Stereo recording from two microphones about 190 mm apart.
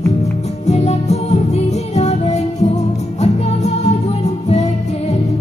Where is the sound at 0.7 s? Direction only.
35° left (ahead or behind).